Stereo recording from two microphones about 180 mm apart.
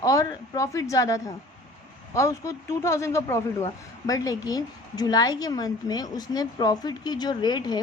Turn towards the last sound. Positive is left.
turn(degrees=25)  # may be behind; listen again after turning